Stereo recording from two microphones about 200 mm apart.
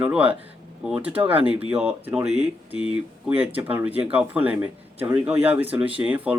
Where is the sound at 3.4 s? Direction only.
10° right (ahead or behind).